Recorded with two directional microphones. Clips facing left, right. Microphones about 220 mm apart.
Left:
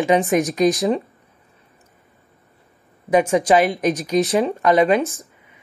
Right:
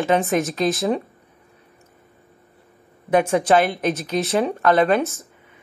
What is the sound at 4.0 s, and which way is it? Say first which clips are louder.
Speech: left 5 dB; centre (ahead or behind).